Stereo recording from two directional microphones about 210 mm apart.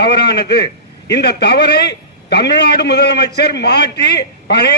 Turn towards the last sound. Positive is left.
turn(degrees=55)  # may be behind; listen again after turning